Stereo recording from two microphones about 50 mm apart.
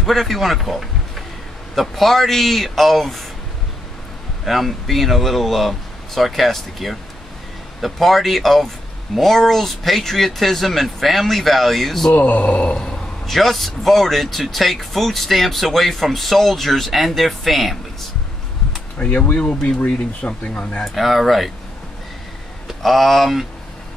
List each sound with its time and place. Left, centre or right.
0.0 s a man's voice: centre
4.5 s speech: centre
12.1 s speech: left
13.3 s speech: centre
18.9 s speech: left
20.8 s speech: centre
22.8 s speech: centre